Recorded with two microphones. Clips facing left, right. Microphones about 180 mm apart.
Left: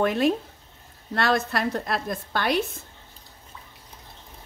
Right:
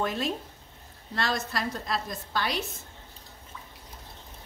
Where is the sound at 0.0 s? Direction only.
65° left (ahead or behind).